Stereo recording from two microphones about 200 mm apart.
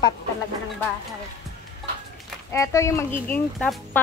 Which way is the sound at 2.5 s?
15° left (ahead or behind).